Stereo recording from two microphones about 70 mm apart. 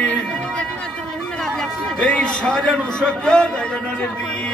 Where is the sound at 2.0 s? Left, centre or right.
Centre.